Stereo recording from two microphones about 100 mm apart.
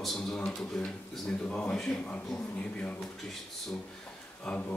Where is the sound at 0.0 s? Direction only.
Centre (ahead or behind).